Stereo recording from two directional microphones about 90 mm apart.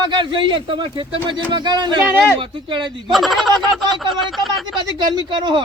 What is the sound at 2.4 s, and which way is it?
Speech, 65° right (ahead or behind).